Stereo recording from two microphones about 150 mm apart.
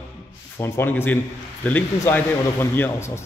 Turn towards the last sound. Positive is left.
turn(degrees=15)  # may be behind; listen again after turning